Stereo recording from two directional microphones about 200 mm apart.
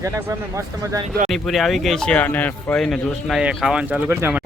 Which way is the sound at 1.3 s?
Centre (ahead or behind).